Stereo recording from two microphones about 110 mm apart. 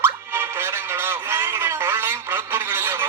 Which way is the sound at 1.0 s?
25° right (ahead or behind).